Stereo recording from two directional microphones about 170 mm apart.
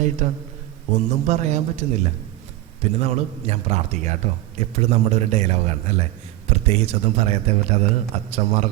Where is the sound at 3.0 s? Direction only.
40° right (ahead or behind).